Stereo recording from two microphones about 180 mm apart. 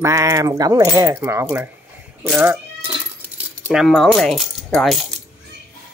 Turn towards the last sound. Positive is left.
turn(degrees=0)  # may be behind; listen again after turning